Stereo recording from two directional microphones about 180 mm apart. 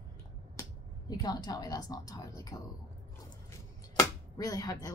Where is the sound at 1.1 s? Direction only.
20° left (ahead or behind).